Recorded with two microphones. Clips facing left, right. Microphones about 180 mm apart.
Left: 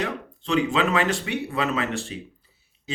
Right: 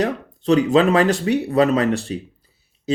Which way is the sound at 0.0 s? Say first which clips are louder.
Right 8 dB; 40° right (ahead or behind).